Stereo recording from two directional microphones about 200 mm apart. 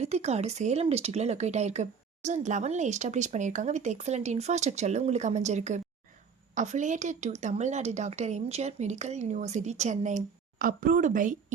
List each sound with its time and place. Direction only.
0.0 s speech: 35° right (ahead or behind)